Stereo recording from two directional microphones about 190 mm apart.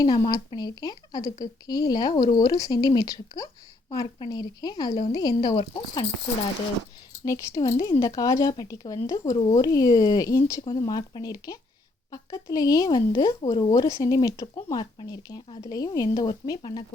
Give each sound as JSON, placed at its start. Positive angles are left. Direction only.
{"t": 0.0, "sound": "a woman's voice", "side_deg": 20}
{"t": 7.3, "sound": "a woman's voice", "side_deg": 15}